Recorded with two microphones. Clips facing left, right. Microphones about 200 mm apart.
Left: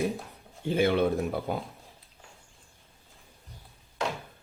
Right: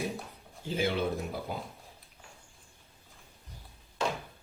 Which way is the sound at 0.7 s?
55° left (ahead or behind).